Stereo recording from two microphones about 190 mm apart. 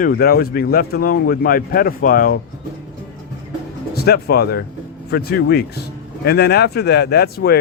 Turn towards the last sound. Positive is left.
turn(degrees=55)  # may be behind; listen again after turning